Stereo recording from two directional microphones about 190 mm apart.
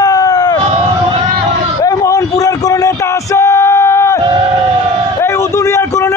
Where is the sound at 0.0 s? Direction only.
20° left (ahead or behind).